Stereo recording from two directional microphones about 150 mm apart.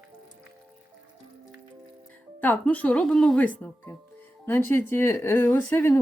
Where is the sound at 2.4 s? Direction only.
10° left (ahead or behind).